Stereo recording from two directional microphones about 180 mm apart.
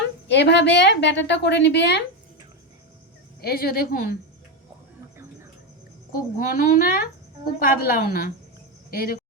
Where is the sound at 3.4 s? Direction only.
60° left (ahead or behind).